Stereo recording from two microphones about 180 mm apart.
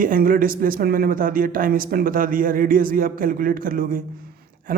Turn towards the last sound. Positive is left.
turn(degrees=-50)  # may be behind; listen again after turning